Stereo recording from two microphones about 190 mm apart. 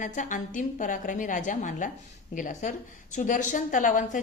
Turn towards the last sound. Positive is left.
turn(degrees=45)  # may be behind; listen again after turning